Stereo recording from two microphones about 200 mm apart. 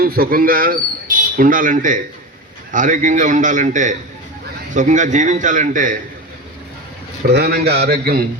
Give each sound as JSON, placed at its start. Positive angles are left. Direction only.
{"t": 0.0, "sound": "a man's voice", "side_deg": -50}
{"t": 7.3, "sound": "speech", "side_deg": -50}